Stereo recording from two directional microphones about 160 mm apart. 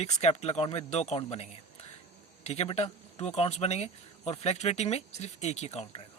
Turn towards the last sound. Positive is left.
turn(degrees=40)  # may be behind; listen again after turning